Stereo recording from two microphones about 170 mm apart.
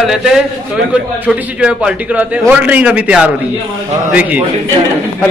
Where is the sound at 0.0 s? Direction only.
5° right (ahead or behind).